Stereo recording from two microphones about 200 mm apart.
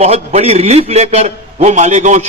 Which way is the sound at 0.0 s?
35° right (ahead or behind).